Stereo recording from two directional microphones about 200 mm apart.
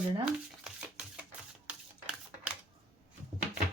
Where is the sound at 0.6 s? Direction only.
5° right (ahead or behind).